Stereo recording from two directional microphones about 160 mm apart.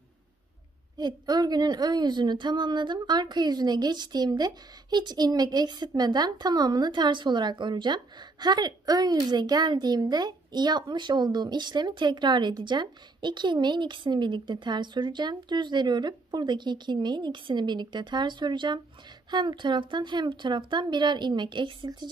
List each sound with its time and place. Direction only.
0.9 s a woman's voice: 25° right (ahead or behind)